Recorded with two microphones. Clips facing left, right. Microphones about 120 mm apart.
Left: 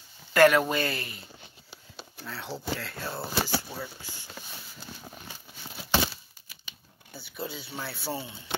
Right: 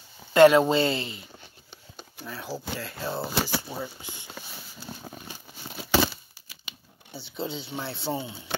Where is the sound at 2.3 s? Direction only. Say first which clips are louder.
Even; 5° right (ahead or behind).